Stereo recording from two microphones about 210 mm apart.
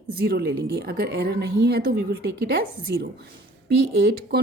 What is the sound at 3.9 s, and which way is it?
Speech, 50° right (ahead or behind).